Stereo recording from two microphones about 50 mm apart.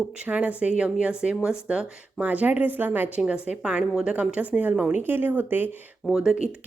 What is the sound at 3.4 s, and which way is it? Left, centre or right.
Speech, right.